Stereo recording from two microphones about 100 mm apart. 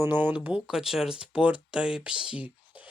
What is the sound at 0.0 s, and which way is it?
Speech, 20° right (ahead or behind).